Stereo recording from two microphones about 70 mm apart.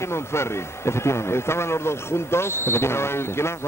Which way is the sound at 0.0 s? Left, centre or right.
Left.